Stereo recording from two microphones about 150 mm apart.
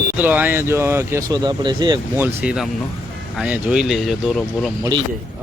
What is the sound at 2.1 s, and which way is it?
Speech, 10° right (ahead or behind).